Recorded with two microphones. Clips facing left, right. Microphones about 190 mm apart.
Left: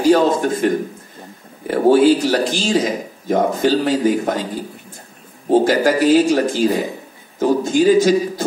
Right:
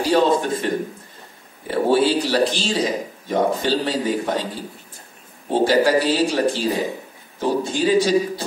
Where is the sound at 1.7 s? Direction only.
45° left (ahead or behind).